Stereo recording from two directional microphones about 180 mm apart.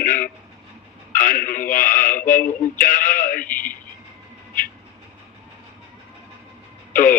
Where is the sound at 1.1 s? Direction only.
50° left (ahead or behind).